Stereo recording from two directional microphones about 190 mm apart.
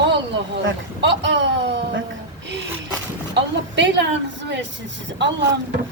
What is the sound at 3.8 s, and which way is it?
A woman's voice, 70° right (ahead or behind).